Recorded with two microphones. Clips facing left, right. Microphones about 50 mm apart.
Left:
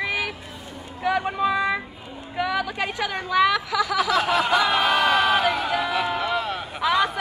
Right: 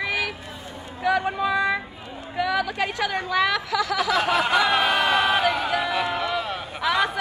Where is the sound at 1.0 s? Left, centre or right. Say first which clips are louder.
Even; centre.